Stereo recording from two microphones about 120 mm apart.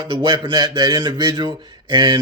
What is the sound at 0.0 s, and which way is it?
Speech, 40° right (ahead or behind).